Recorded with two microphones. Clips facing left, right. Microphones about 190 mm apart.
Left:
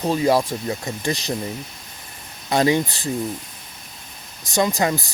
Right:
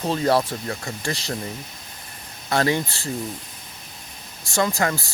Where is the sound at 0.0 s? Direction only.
10° left (ahead or behind).